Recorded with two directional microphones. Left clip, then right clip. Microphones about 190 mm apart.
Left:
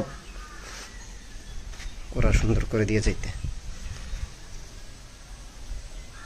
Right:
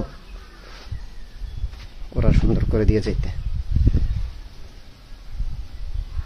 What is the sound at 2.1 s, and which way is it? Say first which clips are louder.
Speech: right 3 dB; 20° right (ahead or behind).